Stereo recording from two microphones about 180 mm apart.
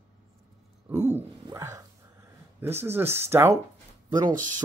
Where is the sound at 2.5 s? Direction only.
10° right (ahead or behind).